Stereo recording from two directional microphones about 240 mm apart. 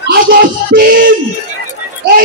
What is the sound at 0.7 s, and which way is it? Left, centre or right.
Music, right.